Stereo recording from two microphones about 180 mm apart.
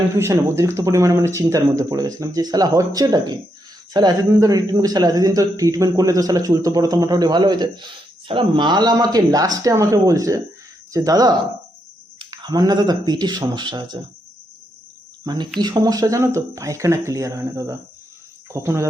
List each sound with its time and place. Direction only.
0.2 s speech: 15° right (ahead or behind)
15.2 s speech: 20° right (ahead or behind)